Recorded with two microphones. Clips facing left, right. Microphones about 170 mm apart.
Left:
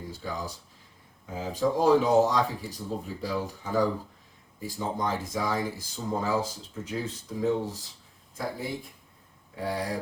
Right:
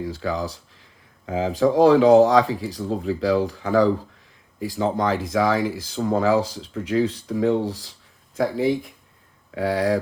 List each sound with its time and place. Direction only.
0.0 s speech: 90° right
8.4 s speech: 90° right